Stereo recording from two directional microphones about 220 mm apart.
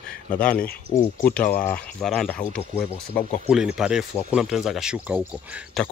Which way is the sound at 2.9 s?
30° left (ahead or behind).